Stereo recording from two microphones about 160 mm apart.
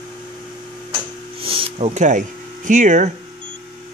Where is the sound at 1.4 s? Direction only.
35° right (ahead or behind).